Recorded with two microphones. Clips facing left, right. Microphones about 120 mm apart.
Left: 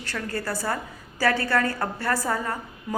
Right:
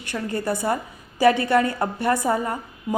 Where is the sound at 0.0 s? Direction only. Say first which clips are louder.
Right 4 dB; 20° right (ahead or behind).